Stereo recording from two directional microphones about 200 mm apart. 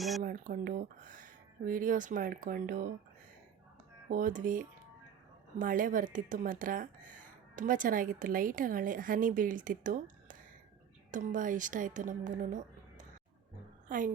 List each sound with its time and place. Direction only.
0.2 s speech: 40° right (ahead or behind)
4.1 s a woman's voice: 40° right (ahead or behind)